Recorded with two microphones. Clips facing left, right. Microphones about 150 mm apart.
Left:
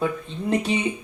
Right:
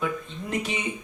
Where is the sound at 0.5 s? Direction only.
30° left (ahead or behind).